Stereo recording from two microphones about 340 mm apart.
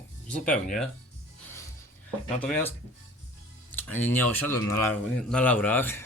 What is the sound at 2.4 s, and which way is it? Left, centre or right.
Speech, centre.